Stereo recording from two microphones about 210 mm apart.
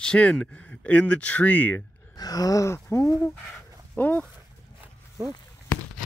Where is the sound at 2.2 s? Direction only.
15° left (ahead or behind).